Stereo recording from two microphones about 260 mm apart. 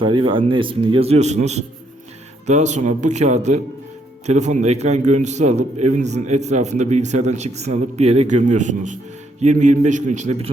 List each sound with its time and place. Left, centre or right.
0.0 s a man's voice: centre